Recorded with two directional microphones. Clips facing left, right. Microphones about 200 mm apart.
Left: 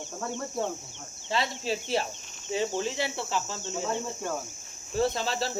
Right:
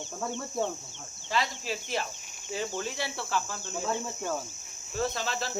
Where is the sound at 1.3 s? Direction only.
30° left (ahead or behind).